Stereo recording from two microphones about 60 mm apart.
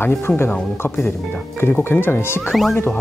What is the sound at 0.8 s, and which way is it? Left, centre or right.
Speech, left.